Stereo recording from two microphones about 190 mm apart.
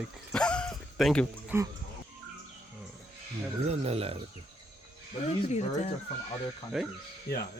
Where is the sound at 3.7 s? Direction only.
30° right (ahead or behind).